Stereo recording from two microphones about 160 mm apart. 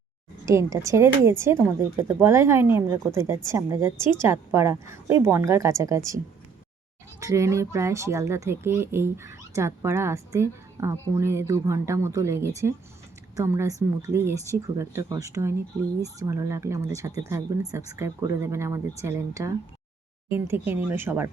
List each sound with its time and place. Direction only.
0.4 s speech: 20° right (ahead or behind)
7.2 s speech: 20° right (ahead or behind)